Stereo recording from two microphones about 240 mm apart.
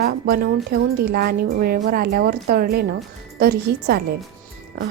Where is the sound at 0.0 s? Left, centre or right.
Right.